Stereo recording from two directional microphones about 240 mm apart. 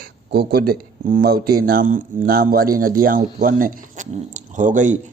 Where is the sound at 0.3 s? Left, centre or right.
Right.